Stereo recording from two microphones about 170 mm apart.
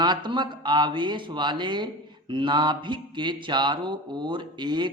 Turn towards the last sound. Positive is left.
turn(degrees=-25)  # may be behind; listen again after turning